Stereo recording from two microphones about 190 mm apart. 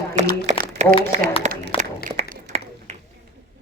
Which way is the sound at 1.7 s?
30° left (ahead or behind).